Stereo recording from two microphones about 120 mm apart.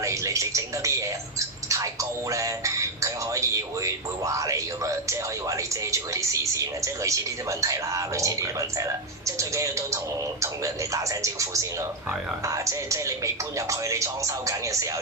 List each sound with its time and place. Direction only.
0.0 s speech: 25° right (ahead or behind)
2.3 s speech: 25° right (ahead or behind)
11.2 s speech: 25° right (ahead or behind)